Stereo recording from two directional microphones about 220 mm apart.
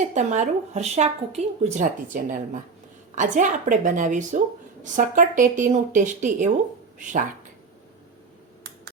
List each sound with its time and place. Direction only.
0.1 s speech: 35° right (ahead or behind)